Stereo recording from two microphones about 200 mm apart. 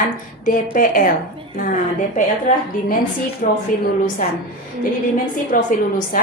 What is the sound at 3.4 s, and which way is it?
Speech, 45° left (ahead or behind).